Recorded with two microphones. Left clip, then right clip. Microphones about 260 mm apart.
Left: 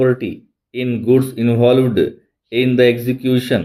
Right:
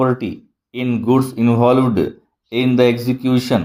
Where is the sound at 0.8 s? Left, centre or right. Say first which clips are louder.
Left 2 dB; right.